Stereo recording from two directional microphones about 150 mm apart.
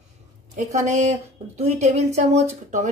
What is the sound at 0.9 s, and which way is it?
A woman's voice, 50° right (ahead or behind).